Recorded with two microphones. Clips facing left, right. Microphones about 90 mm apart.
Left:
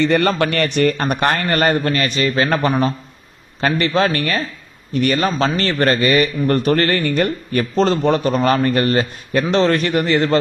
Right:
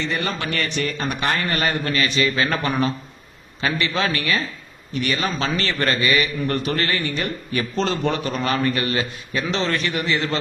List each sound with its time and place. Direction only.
0.0 s a man's voice: 60° left (ahead or behind)